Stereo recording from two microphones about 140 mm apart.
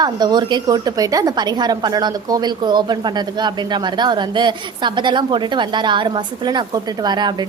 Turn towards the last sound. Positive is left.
turn(degrees=-30)  # may be behind; listen again after turning